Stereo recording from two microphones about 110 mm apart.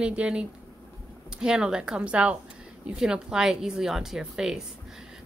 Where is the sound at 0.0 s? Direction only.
10° right (ahead or behind).